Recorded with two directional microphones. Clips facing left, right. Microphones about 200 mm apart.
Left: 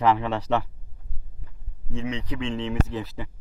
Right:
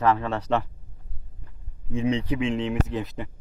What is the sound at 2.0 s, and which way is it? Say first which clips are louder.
Speech: right 6 dB; 30° right (ahead or behind).